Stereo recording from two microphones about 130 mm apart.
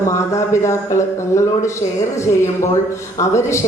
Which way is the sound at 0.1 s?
20° left (ahead or behind).